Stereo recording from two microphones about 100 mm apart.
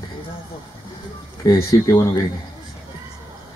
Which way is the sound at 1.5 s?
35° left (ahead or behind).